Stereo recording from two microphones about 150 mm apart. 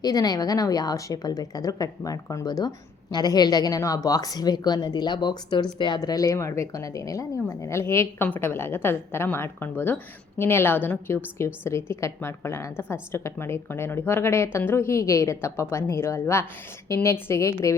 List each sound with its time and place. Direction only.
0.0 s a woman's voice: 25° left (ahead or behind)